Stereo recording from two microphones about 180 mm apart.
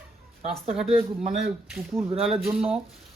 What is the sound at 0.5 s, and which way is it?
Speech, centre (ahead or behind).